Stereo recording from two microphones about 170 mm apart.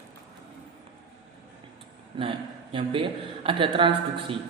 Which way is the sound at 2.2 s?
30° right (ahead or behind).